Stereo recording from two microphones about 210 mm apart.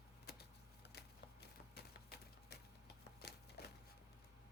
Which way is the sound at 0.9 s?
50° left (ahead or behind).